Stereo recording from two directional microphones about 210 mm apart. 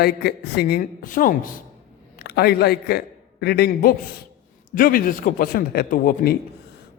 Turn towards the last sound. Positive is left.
turn(degrees=45)  # may be behind; listen again after turning